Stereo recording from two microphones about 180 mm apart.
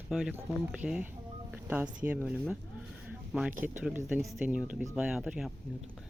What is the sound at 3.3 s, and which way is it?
Speech, centre (ahead or behind).